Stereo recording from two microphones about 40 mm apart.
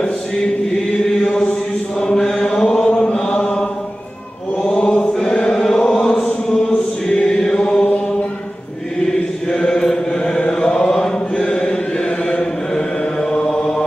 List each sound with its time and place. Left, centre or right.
1.0 s chant: centre
2.0 s mantra: centre
4.6 s chant: centre
9.5 s chant: centre